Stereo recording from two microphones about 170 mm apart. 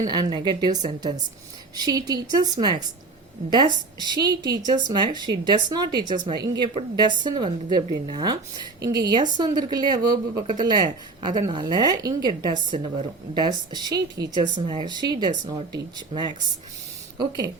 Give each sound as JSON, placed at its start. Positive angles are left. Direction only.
{"t": 0.1, "sound": "a woman's voice", "side_deg": -25}